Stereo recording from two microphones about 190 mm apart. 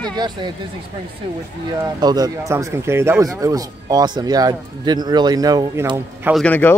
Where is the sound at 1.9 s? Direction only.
20° right (ahead or behind).